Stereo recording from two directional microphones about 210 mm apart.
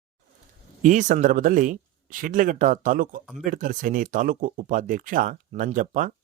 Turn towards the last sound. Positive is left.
turn(degrees=-40)  # may be behind; listen again after turning